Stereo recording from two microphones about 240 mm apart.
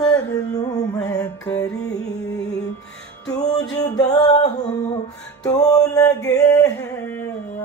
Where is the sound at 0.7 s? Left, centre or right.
Centre.